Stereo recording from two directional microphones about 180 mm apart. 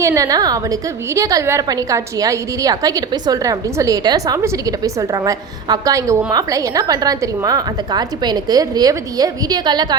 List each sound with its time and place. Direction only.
0.0 s a woman's voice: 15° right (ahead or behind)